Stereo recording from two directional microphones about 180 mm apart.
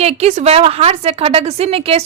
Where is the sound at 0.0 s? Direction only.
35° right (ahead or behind).